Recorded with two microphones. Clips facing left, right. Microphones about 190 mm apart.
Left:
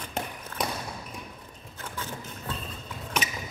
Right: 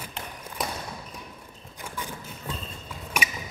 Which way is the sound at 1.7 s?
15° right (ahead or behind).